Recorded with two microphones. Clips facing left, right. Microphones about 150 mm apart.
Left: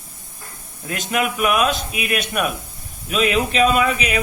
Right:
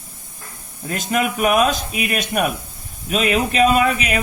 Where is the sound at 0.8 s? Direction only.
40° right (ahead or behind).